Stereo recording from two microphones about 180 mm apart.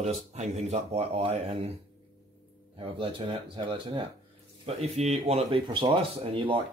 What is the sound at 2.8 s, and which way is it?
Speech, 30° right (ahead or behind).